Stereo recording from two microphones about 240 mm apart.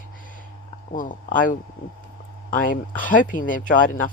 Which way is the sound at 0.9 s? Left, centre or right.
Left.